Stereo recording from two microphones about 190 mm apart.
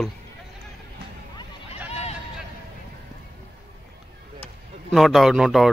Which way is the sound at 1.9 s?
35° left (ahead or behind).